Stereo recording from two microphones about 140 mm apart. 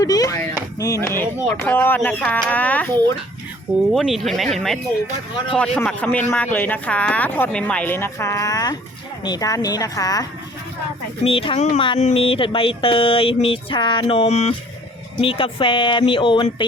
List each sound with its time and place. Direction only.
0.0 s a woman's voice: 25° left (ahead or behind)
1.1 s speech: 15° left (ahead or behind)
3.9 s a woman's voice: centre (ahead or behind); by 10.2 s 25° left (ahead or behind)
11.2 s a woman's voice: 40° left (ahead or behind)
11.9 s a sound: 50° left (ahead or behind)
14.3 s a woman's voice: 50° left (ahead or behind)
15.2 s a sound: 40° left (ahead or behind)